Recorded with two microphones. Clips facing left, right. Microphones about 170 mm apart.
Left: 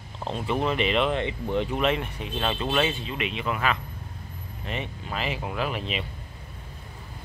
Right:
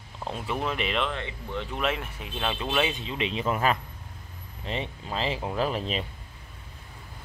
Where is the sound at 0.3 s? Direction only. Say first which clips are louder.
Left 4 dB; centre (ahead or behind).